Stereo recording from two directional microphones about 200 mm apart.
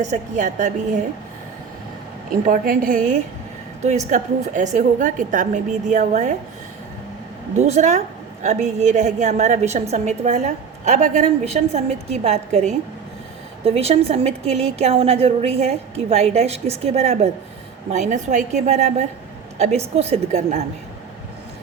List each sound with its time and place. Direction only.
0.0 s a woman's voice: 40° right (ahead or behind)
2.5 s a woman's voice: 45° right (ahead or behind)
7.6 s a woman's voice: 35° right (ahead or behind)